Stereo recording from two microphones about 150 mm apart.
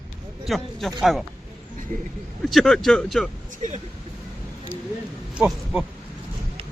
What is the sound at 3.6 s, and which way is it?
Speech, 55° right (ahead or behind).